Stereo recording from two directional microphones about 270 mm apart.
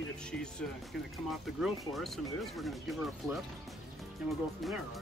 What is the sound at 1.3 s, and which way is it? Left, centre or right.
Speech, centre.